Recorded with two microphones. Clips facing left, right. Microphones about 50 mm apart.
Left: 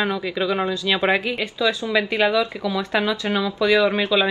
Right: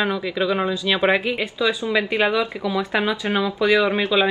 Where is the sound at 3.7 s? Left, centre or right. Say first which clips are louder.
Left 1 dB; centre.